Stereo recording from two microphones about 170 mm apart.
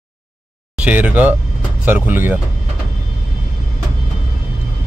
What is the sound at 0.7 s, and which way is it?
Speech, 10° right (ahead or behind).